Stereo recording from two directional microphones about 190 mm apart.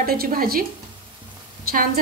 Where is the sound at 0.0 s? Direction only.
50° right (ahead or behind).